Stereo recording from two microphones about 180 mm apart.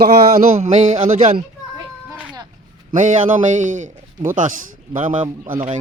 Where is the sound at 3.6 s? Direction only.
45° right (ahead or behind).